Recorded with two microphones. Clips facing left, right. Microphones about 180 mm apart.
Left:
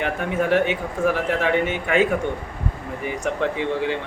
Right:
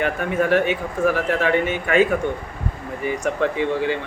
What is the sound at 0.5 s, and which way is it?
Speech, 20° left (ahead or behind).